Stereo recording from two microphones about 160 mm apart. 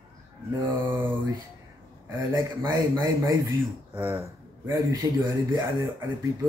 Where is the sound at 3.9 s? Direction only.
10° right (ahead or behind).